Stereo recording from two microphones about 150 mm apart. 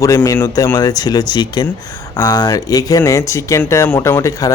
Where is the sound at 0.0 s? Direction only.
20° left (ahead or behind).